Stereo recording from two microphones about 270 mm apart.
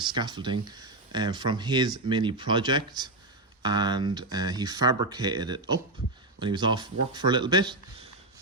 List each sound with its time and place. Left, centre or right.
0.0 s speech: centre